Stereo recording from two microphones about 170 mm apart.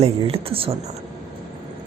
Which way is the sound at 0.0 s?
35° right (ahead or behind).